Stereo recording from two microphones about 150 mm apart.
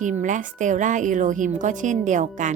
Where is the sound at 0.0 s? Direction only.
55° right (ahead or behind).